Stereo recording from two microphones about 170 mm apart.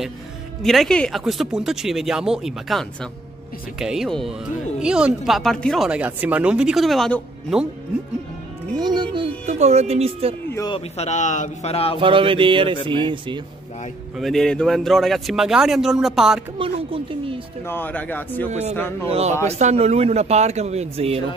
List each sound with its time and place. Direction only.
0.6 s speech: centre (ahead or behind)
8.7 s a child's voice: 25° right (ahead or behind)
9.5 s speech: 40° right (ahead or behind)
10.5 s speech: 20° left (ahead or behind)
11.0 s speech: 45° left (ahead or behind)
12.0 s a child's voice: 30° right (ahead or behind)
14.1 s speech: centre (ahead or behind)
16.5 s speech: 30° right (ahead or behind)
17.6 s speech: 10° left (ahead or behind)
18.5 s speech: 40° right (ahead or behind)
18.8 s speech: 15° left (ahead or behind)
19.0 s speech: 35° right (ahead or behind)